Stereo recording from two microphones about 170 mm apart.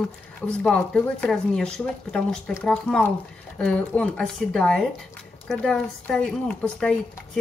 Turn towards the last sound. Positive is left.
turn(degrees=5)  # may be behind; listen again after turning